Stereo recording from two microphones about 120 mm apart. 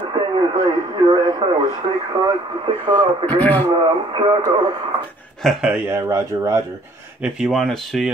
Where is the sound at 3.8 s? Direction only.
40° right (ahead or behind).